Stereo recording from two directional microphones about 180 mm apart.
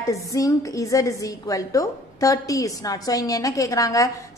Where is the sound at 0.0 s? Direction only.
20° left (ahead or behind).